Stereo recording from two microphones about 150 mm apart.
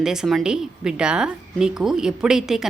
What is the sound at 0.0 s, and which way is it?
A woman's voice, 5° right (ahead or behind).